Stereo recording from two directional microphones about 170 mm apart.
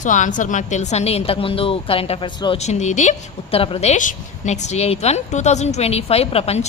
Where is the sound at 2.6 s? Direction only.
40° left (ahead or behind).